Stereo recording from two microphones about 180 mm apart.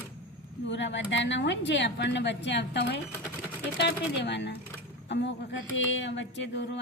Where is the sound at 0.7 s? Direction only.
80° left.